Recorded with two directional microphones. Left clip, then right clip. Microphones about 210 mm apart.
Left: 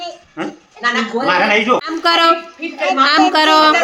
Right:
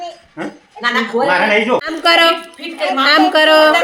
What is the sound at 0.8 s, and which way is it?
Speech, 35° right (ahead or behind).